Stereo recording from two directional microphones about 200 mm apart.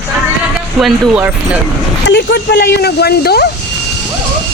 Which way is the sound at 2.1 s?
55° left (ahead or behind).